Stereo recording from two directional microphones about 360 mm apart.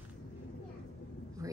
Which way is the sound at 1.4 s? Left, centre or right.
Centre.